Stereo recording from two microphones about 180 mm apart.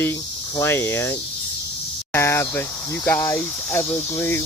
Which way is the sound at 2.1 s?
15° left (ahead or behind).